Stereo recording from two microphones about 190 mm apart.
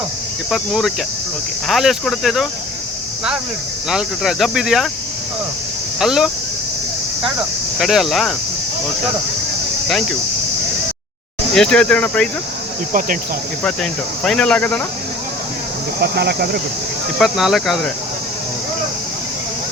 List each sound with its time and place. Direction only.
0.5 s speech: centre (ahead or behind)
3.8 s speech: centre (ahead or behind)
6.0 s speech: centre (ahead or behind)
7.8 s speech: centre (ahead or behind)
11.5 s speech: 5° left (ahead or behind)
12.9 s speech: 45° right (ahead or behind)
14.3 s speech: 5° left (ahead or behind)
16.0 s speech: 55° right (ahead or behind)
17.2 s speech: centre (ahead or behind)